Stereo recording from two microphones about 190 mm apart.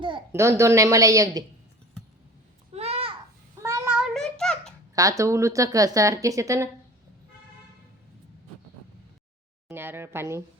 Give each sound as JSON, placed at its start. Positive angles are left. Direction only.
{"t": 0.3, "sound": "a woman's voice", "side_deg": -15}
{"t": 2.7, "sound": "a sound", "side_deg": -35}
{"t": 3.6, "sound": "child singing", "side_deg": -15}
{"t": 3.9, "sound": "child singing", "side_deg": 0}
{"t": 4.9, "sound": "a woman's voice", "side_deg": -15}
{"t": 9.6, "sound": "speech", "side_deg": -10}